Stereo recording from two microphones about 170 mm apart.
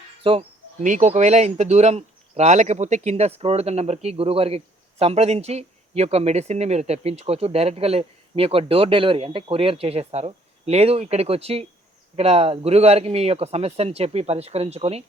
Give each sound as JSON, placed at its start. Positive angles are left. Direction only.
{"t": 0.2, "sound": "speech", "side_deg": -30}
{"t": 0.8, "sound": "speech", "side_deg": -45}